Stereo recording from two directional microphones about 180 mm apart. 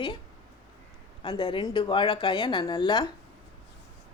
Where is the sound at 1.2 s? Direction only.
25° left (ahead or behind).